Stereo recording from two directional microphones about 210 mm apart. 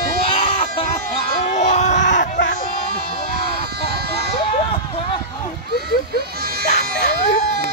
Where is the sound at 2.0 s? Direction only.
60° left (ahead or behind).